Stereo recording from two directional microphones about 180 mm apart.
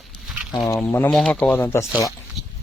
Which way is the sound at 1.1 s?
Centre (ahead or behind).